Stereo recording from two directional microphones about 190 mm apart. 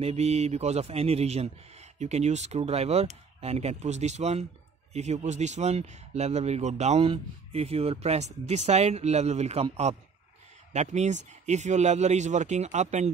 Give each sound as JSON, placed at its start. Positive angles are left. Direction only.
{"t": 0.0, "sound": "a man's voice", "side_deg": -35}